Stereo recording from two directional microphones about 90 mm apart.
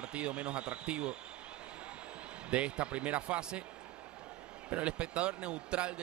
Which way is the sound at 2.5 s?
15° right (ahead or behind).